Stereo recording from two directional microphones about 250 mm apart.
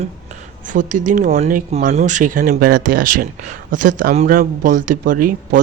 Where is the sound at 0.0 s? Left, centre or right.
Right.